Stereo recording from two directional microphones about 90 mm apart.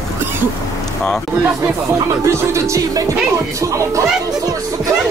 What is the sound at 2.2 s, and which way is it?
Music, 35° right (ahead or behind).